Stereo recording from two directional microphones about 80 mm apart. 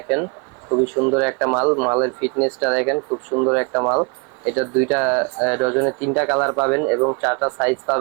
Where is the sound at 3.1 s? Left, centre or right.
Right.